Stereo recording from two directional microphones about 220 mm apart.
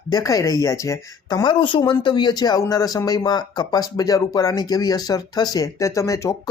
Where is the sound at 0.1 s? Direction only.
15° left (ahead or behind).